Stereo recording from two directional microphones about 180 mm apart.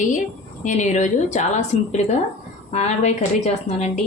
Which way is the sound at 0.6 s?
40° left (ahead or behind).